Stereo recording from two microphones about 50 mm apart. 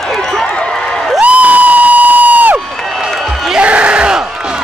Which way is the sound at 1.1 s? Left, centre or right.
Right.